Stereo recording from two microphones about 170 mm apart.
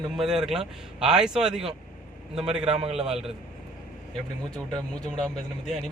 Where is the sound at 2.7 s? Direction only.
35° right (ahead or behind).